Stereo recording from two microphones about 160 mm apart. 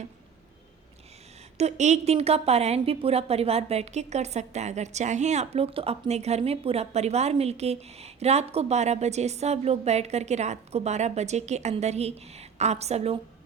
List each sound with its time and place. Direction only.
1.5 s a woman's voice: 45° right (ahead or behind)